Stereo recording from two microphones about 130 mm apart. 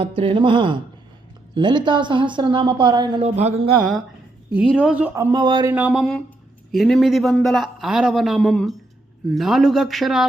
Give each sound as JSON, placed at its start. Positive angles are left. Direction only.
{"t": 0.0, "sound": "a woman's voice", "side_deg": -45}
{"t": 3.2, "sound": "speech", "side_deg": -55}
{"t": 4.8, "sound": "speech", "side_deg": -10}
{"t": 5.3, "sound": "a woman's voice", "side_deg": -35}
{"t": 5.7, "sound": "a man's voice", "side_deg": -10}